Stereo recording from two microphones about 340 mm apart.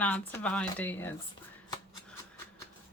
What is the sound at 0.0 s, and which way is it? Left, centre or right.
Speech, centre.